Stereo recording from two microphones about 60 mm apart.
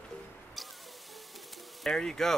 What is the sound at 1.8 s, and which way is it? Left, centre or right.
Speech, centre.